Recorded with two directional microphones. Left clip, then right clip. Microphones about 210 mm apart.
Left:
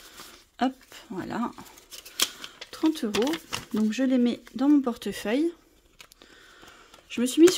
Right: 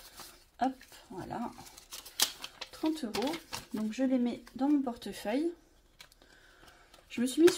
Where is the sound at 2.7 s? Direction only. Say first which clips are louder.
Left 8 dB; 40° left (ahead or behind).